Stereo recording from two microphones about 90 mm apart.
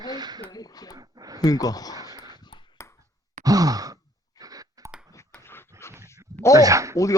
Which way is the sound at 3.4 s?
40° right (ahead or behind).